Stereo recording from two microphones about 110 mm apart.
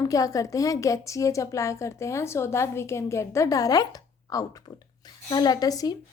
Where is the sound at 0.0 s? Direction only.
30° left (ahead or behind).